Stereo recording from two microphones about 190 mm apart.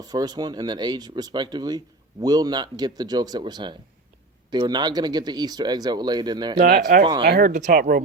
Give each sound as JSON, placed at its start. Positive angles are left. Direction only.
{"t": 0.0, "sound": "speech", "side_deg": -20}
{"t": 6.7, "sound": "speech", "side_deg": -45}
{"t": 7.2, "sound": "speech", "side_deg": -55}
{"t": 7.5, "sound": "speech", "side_deg": -45}